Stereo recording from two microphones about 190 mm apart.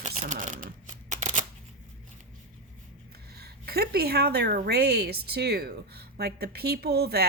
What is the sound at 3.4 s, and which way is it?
A woman's voice, 55° right (ahead or behind).